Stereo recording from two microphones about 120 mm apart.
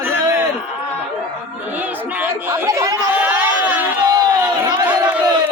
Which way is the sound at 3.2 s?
15° right (ahead or behind).